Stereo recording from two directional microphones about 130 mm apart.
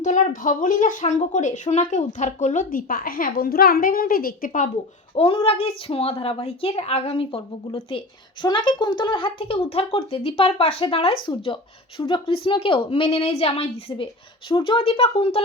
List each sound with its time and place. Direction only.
0.0 s a woman's voice: 75° left (ahead or behind)
5.1 s a woman's voice: 45° left (ahead or behind)